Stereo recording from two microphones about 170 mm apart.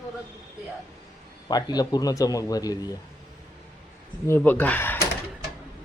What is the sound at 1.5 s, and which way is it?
Speech, 25° left (ahead or behind).